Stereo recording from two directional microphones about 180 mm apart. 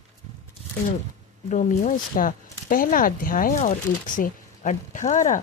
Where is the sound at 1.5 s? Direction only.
45° left (ahead or behind).